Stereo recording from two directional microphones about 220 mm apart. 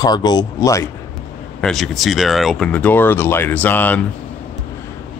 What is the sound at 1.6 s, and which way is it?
Speech, centre (ahead or behind).